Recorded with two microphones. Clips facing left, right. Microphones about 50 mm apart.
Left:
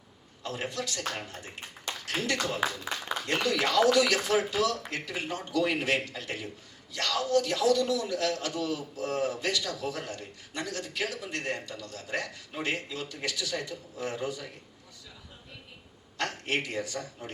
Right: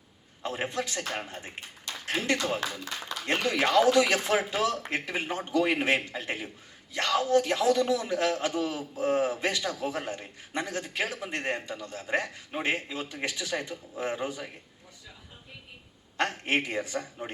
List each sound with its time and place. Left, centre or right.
0.4 s a man's voice: right
16.1 s a man's voice: right